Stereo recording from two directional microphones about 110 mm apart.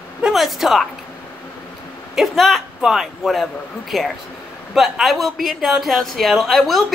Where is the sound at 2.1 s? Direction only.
Centre (ahead or behind).